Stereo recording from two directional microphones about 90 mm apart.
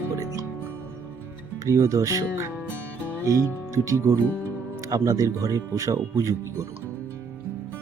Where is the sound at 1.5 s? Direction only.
35° right (ahead or behind).